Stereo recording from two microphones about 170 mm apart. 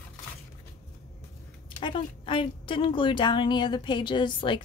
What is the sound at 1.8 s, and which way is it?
A woman's voice, 30° left (ahead or behind).